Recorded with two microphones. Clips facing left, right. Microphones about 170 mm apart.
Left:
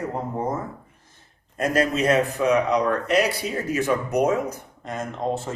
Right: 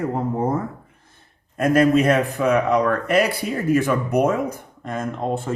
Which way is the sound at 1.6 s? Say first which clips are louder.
Right 6 dB; 55° right (ahead or behind).